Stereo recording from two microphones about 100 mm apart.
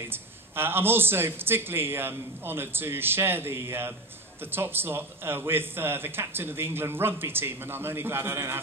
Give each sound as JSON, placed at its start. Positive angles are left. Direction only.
{"t": 0.1, "sound": "a man's voice", "side_deg": -20}